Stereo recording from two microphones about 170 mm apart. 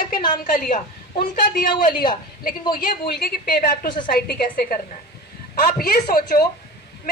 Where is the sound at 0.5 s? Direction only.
55° left (ahead or behind).